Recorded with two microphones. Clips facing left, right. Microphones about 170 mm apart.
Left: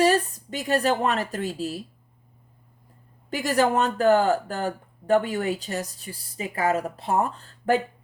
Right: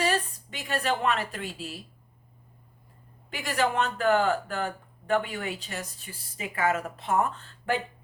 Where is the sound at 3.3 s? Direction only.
40° left (ahead or behind).